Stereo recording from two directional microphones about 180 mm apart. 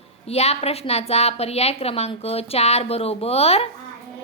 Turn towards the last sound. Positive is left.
turn(degrees=35)  # may be behind; listen again after turning